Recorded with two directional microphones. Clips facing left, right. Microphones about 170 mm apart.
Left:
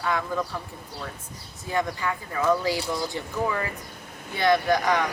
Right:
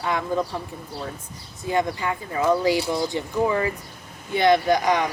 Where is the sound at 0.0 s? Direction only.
20° right (ahead or behind).